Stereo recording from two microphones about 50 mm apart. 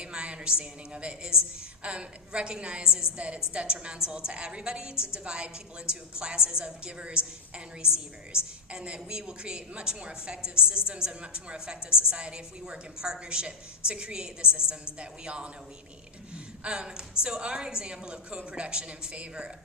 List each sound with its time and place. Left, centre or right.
0.0 s a woman's voice: right
16.3 s gasp: centre
17.2 s a woman's voice: centre